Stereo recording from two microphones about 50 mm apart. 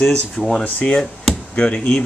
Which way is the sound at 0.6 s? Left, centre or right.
Left.